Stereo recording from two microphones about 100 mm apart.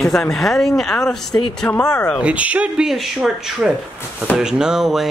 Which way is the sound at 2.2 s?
10° right (ahead or behind).